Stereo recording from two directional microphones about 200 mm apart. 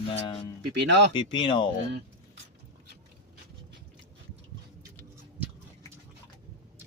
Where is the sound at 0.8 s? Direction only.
60° right (ahead or behind).